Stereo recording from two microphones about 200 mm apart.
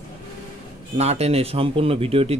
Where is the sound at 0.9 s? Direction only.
30° right (ahead or behind).